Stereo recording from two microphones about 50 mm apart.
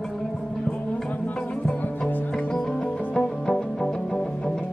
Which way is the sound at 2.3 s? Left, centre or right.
Centre.